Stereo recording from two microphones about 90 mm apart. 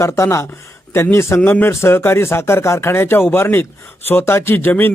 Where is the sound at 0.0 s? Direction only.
30° left (ahead or behind).